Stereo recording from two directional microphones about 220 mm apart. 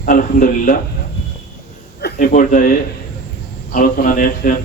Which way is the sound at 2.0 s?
40° left (ahead or behind).